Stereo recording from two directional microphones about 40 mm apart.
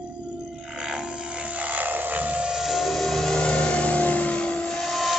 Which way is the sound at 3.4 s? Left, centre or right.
Left.